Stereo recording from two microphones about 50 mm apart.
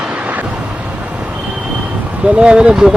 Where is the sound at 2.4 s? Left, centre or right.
Centre.